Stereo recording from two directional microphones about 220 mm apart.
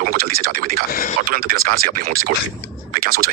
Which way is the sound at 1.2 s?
40° right (ahead or behind).